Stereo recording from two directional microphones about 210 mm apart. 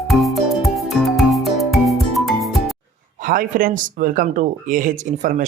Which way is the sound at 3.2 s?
40° right (ahead or behind).